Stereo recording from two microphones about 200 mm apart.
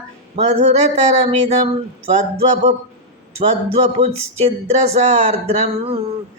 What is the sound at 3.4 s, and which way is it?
Mantra, 30° right (ahead or behind).